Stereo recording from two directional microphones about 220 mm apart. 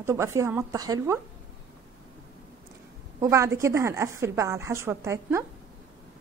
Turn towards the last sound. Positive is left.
turn(degrees=-10)  # may be behind; listen again after turning